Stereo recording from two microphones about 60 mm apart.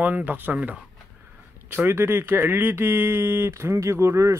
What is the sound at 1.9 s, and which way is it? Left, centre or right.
Speech, right.